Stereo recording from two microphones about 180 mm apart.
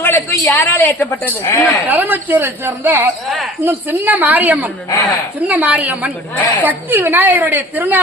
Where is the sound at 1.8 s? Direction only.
10° right (ahead or behind).